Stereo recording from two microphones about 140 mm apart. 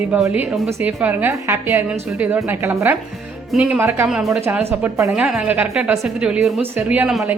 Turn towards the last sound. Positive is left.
turn(degrees=-5)  # may be behind; listen again after turning